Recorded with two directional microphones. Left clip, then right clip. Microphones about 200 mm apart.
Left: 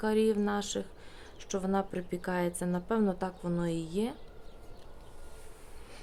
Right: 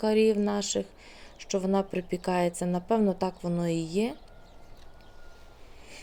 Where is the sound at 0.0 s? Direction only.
15° right (ahead or behind).